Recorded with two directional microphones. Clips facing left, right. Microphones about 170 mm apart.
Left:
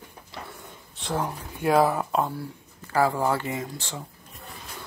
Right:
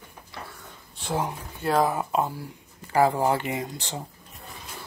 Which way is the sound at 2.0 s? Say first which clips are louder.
Even; 5° right (ahead or behind).